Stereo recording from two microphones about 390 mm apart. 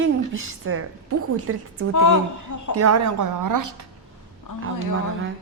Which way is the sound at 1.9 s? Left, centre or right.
Left.